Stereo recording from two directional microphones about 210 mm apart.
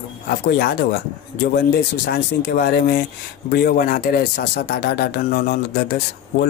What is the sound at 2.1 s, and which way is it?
Speech, 50° left (ahead or behind).